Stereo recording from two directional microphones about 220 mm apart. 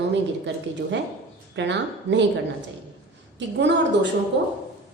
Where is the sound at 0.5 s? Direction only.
50° right (ahead or behind).